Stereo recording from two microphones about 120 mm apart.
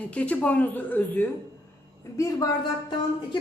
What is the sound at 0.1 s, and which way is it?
A man's voice, 10° left (ahead or behind).